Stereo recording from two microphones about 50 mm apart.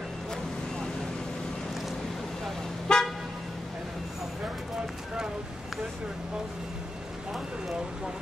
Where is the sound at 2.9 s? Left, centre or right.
Centre.